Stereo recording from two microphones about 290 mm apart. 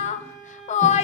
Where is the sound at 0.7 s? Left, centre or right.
Left.